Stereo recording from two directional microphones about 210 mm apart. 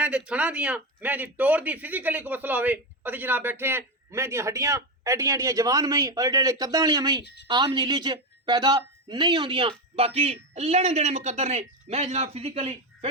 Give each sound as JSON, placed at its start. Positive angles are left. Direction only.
{"t": 0.0, "sound": "speech", "side_deg": -5}